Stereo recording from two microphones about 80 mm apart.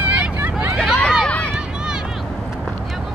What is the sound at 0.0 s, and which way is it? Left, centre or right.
Hubbub, centre.